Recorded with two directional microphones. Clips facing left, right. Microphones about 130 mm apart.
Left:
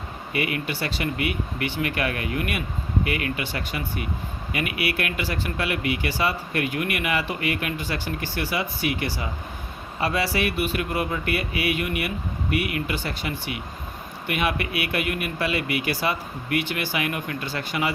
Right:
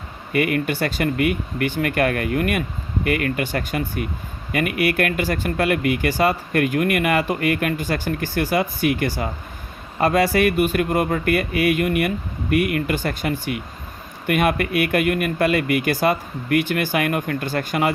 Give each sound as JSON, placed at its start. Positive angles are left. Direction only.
{"t": 0.3, "sound": "speech", "side_deg": -50}